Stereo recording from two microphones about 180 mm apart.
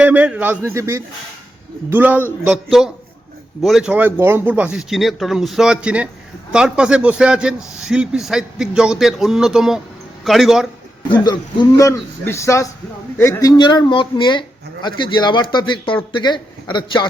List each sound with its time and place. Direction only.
0.0 s a man's voice: 5° right (ahead or behind)
11.2 s a man's voice: 20° left (ahead or behind)